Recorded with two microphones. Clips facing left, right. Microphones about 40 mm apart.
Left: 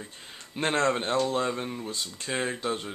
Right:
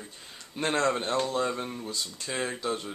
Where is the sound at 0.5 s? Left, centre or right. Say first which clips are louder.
Left 1 dB; left.